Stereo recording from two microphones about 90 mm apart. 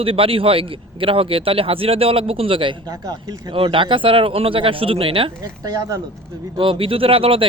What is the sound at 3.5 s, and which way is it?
Speech, 75° right (ahead or behind).